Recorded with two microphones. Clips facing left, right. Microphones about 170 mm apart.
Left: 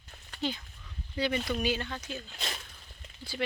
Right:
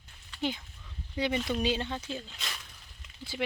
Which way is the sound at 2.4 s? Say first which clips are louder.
Left 4 dB; 30° left (ahead or behind).